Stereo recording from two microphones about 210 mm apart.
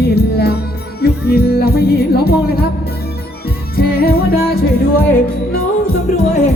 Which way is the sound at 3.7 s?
45° left (ahead or behind).